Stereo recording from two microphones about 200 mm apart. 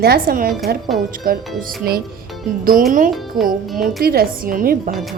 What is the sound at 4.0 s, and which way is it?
Speech, 50° right (ahead or behind).